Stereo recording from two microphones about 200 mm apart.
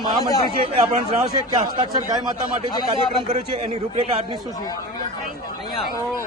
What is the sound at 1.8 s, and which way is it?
Speech, 20° right (ahead or behind).